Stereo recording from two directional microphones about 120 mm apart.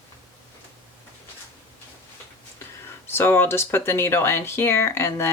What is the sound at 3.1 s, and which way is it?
Speech, 20° left (ahead or behind).